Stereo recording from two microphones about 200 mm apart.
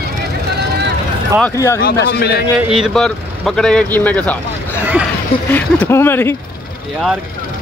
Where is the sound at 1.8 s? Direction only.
55° left (ahead or behind).